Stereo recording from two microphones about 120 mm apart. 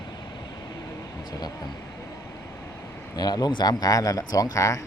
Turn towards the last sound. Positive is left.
turn(degrees=25)  # may be behind; listen again after turning